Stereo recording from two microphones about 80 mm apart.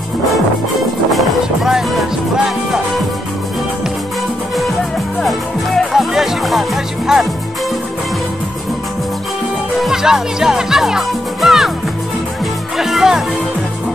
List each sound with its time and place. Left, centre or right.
1.1 s music: centre
5.2 s music: centre
9.8 s music: centre
12.7 s music: centre